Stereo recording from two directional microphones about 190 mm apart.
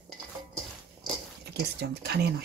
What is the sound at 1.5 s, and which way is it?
Speech, 60° right (ahead or behind).